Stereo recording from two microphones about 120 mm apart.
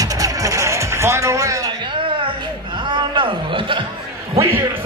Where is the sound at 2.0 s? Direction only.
45° right (ahead or behind).